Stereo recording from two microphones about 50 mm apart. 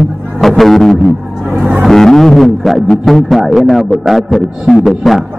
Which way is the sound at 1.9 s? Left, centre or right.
Centre.